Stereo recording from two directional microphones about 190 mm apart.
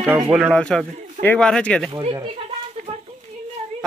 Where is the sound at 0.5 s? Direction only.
5° left (ahead or behind).